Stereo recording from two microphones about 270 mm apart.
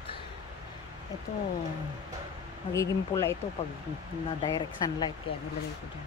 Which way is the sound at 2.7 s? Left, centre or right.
Centre.